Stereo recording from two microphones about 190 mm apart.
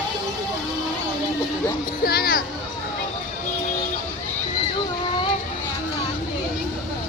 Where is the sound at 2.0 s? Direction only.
55° left (ahead or behind).